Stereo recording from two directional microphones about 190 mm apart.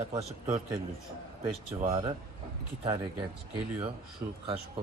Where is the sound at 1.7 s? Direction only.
20° right (ahead or behind).